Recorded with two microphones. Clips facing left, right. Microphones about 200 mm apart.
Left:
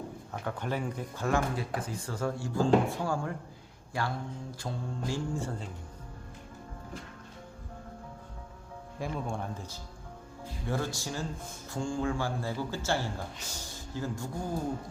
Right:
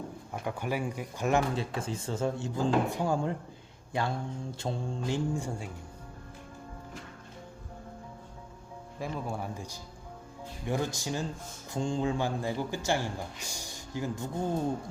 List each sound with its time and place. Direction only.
0.4 s a man's voice: 10° right (ahead or behind)
9.0 s a man's voice: centre (ahead or behind); by 14.6 s 25° right (ahead or behind)